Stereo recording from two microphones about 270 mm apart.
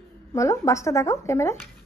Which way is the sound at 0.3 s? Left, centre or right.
Centre.